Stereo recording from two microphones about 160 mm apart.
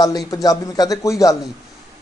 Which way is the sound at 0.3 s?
25° left (ahead or behind).